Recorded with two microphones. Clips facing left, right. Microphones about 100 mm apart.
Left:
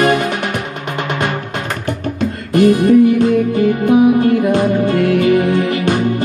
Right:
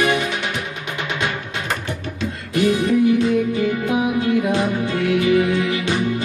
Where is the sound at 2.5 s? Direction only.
50° left (ahead or behind).